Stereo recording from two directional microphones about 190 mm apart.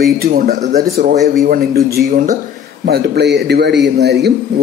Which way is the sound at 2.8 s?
60° right (ahead or behind).